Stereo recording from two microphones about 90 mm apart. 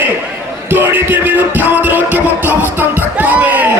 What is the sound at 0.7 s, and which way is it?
Music, 20° right (ahead or behind).